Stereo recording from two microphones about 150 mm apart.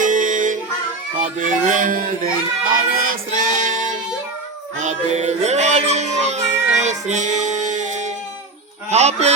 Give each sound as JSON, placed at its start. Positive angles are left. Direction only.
{"t": 0.0, "sound": "music", "side_deg": -60}
{"t": 1.4, "sound": "chicken", "side_deg": -60}
{"t": 2.9, "sound": "music", "side_deg": -70}
{"t": 4.8, "sound": "child singing", "side_deg": -50}
{"t": 8.9, "sound": "speech", "side_deg": -45}